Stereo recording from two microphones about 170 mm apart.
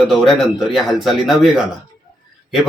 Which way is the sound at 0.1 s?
Centre (ahead or behind).